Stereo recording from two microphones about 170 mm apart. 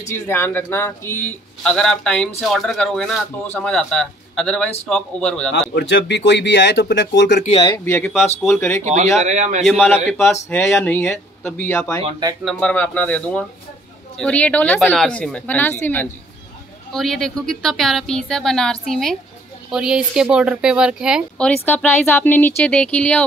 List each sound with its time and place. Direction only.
0.1 s speech: 15° left (ahead or behind)
5.8 s speech: 90° left
7.8 s speech: 10° left (ahead or behind)
9.2 s speech: 45° right (ahead or behind)
9.7 s speech: centre (ahead or behind)
16.9 s speech: centre (ahead or behind)
21.6 s speech: 10° left (ahead or behind)